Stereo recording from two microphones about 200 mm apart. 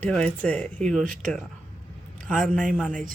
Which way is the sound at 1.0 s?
40° right (ahead or behind).